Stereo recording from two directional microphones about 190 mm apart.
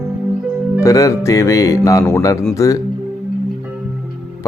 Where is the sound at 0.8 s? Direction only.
15° left (ahead or behind).